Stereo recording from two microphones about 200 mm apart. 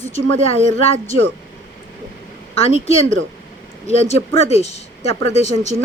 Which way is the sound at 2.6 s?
30° left (ahead or behind).